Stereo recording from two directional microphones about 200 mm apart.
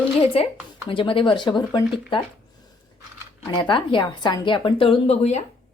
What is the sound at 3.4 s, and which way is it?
A woman's voice, 25° left (ahead or behind).